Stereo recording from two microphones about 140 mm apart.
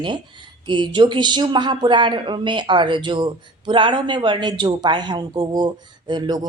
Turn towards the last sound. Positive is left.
turn(degrees=-30)  # may be behind; listen again after turning